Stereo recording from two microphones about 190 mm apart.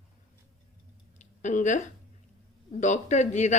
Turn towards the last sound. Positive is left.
turn(degrees=40)  # may be behind; listen again after turning